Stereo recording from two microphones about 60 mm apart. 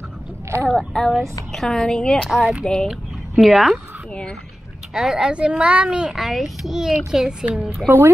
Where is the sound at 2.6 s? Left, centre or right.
Centre.